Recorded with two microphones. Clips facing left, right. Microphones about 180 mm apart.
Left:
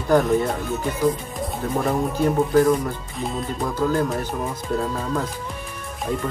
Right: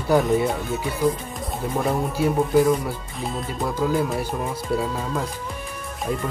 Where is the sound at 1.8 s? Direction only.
5° right (ahead or behind).